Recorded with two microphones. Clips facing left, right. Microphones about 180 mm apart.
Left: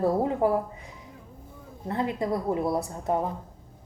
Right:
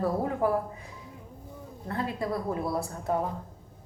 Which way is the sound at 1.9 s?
20° left (ahead or behind).